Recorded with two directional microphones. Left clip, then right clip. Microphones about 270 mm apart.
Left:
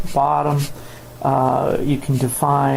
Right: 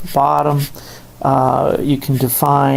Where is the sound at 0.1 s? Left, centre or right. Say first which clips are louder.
Right 4 dB; right.